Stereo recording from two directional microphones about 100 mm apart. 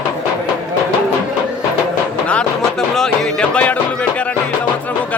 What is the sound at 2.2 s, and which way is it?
Music, 10° left (ahead or behind).